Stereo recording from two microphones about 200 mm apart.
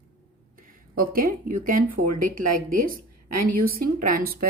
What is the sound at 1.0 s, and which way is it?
Speech, 45° right (ahead or behind).